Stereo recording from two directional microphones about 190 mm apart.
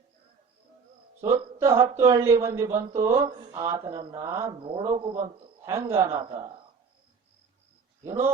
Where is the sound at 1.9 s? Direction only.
15° right (ahead or behind); by 5.2 s 30° right (ahead or behind).